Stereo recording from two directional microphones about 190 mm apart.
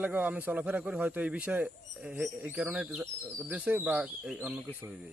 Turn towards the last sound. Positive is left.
turn(degrees=-5)  # may be behind; listen again after turning